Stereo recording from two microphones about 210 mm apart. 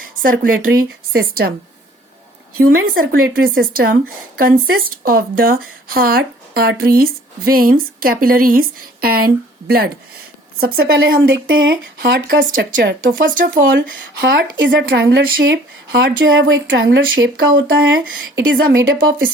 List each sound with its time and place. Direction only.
0.2 s speech: 40° right (ahead or behind)
2.6 s speech: 45° right (ahead or behind)